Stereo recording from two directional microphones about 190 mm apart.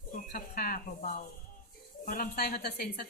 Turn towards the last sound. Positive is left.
turn(degrees=55)  # may be behind; listen again after turning